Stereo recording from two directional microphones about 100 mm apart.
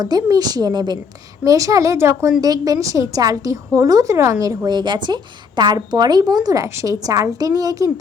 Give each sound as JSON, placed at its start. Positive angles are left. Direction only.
{"t": 0.0, "sound": "a woman's voice", "side_deg": -40}
{"t": 1.5, "sound": "a woman's voice", "side_deg": -35}